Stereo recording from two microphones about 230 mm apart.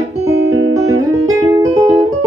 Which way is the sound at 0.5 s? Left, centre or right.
Right.